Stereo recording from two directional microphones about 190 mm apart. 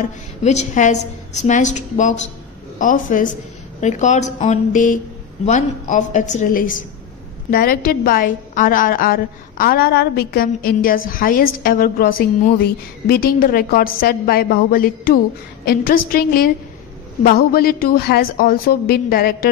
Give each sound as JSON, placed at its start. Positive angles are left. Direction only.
{"t": 0.0, "sound": "a woman's voice", "side_deg": 35}